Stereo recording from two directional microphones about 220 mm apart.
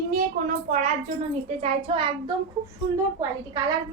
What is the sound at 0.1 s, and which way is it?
A woman's voice, 35° right (ahead or behind).